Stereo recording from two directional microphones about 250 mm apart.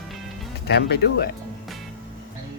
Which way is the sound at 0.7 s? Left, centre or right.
Left.